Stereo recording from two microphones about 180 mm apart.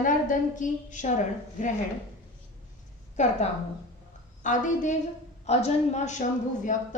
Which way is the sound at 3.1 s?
40° left (ahead or behind).